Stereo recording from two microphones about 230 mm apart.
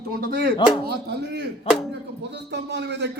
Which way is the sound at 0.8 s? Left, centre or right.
Right.